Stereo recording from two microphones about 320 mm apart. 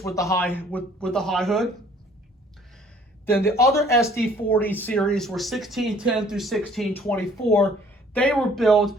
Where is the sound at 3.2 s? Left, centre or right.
Centre.